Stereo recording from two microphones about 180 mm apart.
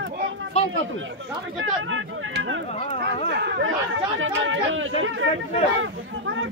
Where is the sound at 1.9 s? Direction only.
90° right.